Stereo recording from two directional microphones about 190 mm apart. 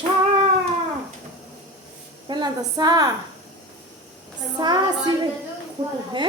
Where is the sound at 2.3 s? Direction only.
20° right (ahead or behind).